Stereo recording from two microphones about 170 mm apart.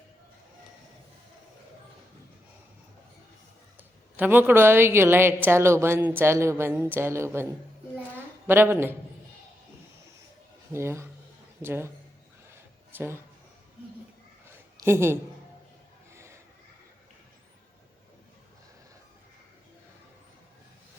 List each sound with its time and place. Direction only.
3.8 s a woman's voice: 10° right (ahead or behind)
8.4 s a woman's voice: 15° right (ahead or behind)
10.7 s a woman's voice: 15° right (ahead or behind)
13.0 s a woman's voice: 15° right (ahead or behind)
14.4 s a sound: 15° right (ahead or behind)